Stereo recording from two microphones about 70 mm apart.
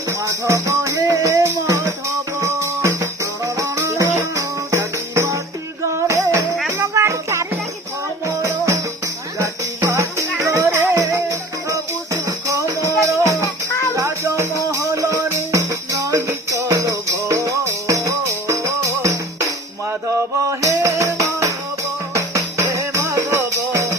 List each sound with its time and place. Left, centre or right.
0.1 s music: right
2.4 s music: right
11.3 s music: right